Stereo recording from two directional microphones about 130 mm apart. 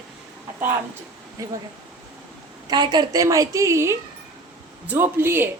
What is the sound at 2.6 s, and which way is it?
A woman's voice, 35° right (ahead or behind).